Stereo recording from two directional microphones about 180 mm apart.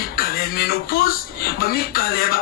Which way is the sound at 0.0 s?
55° left (ahead or behind).